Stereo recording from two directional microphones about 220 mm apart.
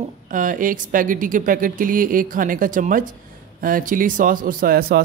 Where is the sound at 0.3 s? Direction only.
35° right (ahead or behind).